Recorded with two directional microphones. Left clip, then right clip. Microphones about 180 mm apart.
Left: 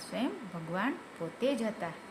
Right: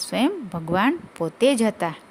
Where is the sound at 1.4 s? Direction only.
70° right (ahead or behind).